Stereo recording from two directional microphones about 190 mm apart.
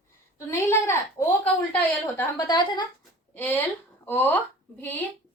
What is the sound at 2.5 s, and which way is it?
Speech, 25° left (ahead or behind).